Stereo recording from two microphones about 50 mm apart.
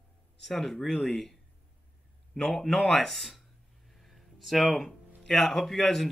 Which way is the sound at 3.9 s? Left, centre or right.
Centre.